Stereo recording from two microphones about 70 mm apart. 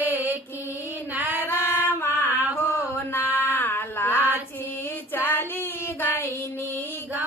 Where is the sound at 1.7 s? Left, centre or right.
Left.